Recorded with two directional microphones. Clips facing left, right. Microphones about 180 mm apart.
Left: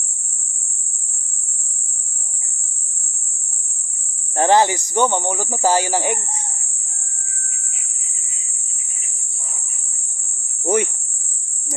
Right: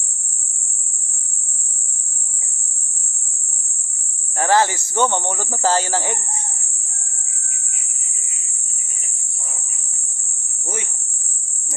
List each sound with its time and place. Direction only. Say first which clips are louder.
4.4 s speech: left 2 dB; 20° left (ahead or behind)
10.6 s cricket: left 12 dB; 65° left (ahead or behind)